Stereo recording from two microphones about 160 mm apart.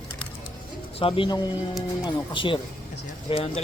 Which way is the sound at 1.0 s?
35° left (ahead or behind).